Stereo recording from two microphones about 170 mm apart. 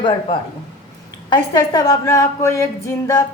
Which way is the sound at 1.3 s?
20° left (ahead or behind).